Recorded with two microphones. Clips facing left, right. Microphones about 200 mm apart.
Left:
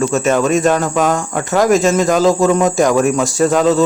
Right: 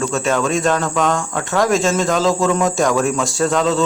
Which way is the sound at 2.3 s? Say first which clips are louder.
Left 4 dB; 20° left (ahead or behind).